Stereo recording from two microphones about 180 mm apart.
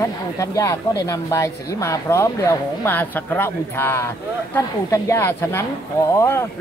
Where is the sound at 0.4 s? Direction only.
20° left (ahead or behind).